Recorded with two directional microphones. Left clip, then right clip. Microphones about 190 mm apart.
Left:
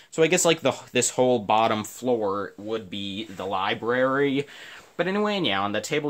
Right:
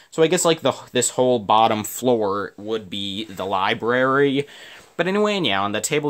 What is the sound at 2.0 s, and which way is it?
Speech, 50° right (ahead or behind).